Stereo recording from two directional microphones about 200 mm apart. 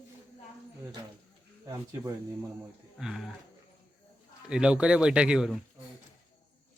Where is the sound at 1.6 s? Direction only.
15° right (ahead or behind).